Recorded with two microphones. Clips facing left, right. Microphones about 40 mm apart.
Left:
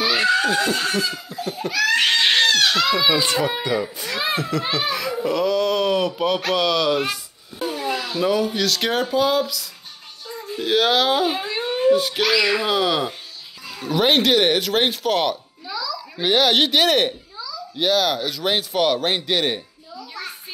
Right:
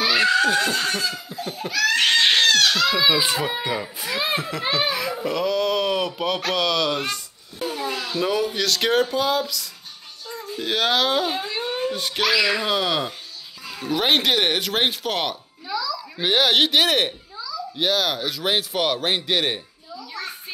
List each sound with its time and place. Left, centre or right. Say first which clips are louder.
0.0 s a child's voice: even; centre
3.8 s a child's voice: left 1 dB; centre
20.0 s a sound: even; centre